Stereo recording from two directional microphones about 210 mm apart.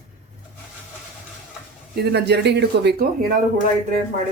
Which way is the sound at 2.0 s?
50° right (ahead or behind).